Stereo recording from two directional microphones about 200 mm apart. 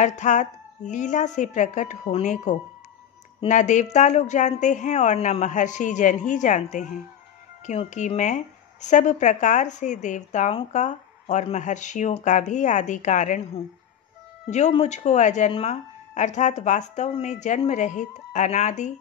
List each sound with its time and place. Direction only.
0.0 s speech: 35° left (ahead or behind)